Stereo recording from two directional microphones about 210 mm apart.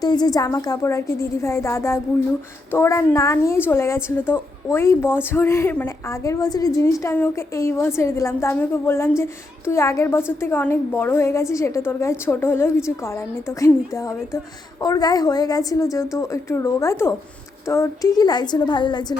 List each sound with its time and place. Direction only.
0.0 s a woman's voice: 20° left (ahead or behind)